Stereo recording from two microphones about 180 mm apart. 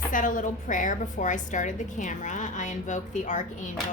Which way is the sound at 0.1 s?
50° left (ahead or behind).